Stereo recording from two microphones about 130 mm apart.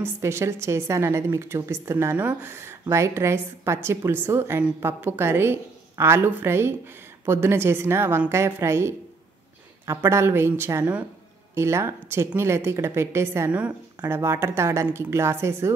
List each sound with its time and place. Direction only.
0.0 s a woman's voice: 20° right (ahead or behind)
13.5 s a woman's voice: 10° right (ahead or behind)